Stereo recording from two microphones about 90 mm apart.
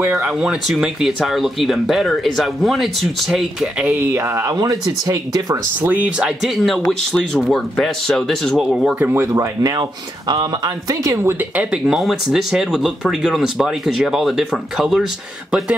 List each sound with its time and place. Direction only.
0.2 s speech: 5° right (ahead or behind)
4.1 s speech: 30° right (ahead or behind)
5.8 s speech: 15° right (ahead or behind); by 8.6 s 5° left (ahead or behind)
9.0 s speech: 25° right (ahead or behind)
9.3 s speech: 40° right (ahead or behind)
11.1 s speech: 30° right (ahead or behind)
11.5 s speech: 5° right (ahead or behind)